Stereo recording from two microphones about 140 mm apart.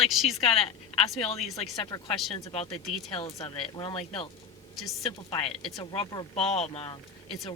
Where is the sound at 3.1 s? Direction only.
40° left (ahead or behind).